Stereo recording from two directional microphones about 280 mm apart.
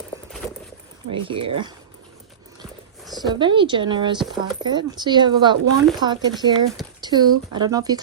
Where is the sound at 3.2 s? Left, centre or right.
Centre.